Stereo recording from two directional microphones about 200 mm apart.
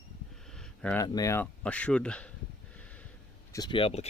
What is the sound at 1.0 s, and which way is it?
Speech, 15° left (ahead or behind).